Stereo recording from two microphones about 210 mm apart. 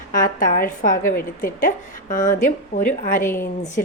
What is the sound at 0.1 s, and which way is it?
A woman's voice, 40° left (ahead or behind).